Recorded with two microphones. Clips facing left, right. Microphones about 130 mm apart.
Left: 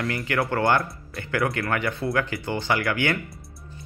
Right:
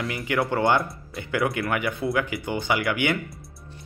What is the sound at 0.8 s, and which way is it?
Speech, centre (ahead or behind).